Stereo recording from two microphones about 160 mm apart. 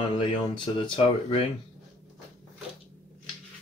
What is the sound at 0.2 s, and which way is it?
Speech, 30° left (ahead or behind).